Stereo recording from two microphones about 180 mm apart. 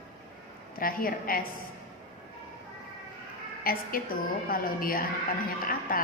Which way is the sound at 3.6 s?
55° left (ahead or behind).